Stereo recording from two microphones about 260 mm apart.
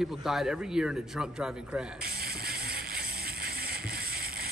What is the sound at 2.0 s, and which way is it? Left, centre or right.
Music, right.